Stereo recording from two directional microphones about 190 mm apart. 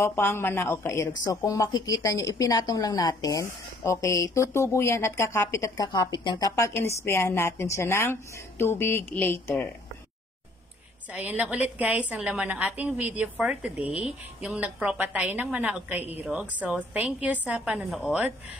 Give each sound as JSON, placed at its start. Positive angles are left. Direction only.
{"t": 0.0, "sound": "speech", "side_deg": 10}
{"t": 11.1, "sound": "a woman's voice", "side_deg": -10}